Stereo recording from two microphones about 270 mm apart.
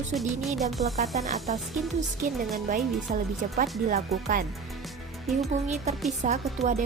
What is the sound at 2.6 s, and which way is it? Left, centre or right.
A woman's voice, right.